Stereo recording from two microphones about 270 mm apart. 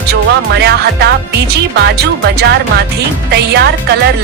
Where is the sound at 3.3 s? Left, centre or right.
Right.